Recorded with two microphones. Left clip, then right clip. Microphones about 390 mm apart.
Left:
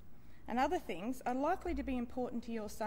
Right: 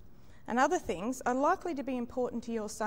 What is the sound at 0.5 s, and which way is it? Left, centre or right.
A woman's voice, right.